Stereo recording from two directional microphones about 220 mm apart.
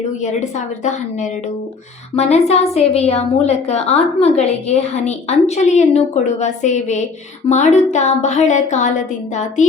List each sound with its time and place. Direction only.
0.2 s a woman's voice: 35° left (ahead or behind)
2.1 s a woman's voice: 30° left (ahead or behind)